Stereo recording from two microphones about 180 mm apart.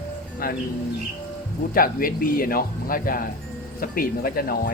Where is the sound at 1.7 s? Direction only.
50° left (ahead or behind).